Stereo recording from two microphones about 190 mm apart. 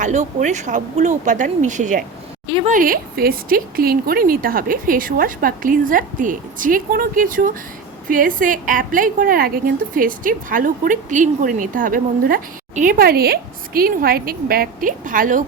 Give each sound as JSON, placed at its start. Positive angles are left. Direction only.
{"t": 0.0, "sound": "a woman's voice", "side_deg": -40}